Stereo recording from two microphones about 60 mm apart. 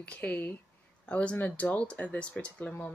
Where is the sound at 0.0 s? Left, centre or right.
Left.